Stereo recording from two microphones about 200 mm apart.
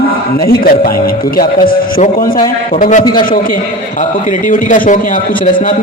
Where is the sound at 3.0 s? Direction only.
25° left (ahead or behind).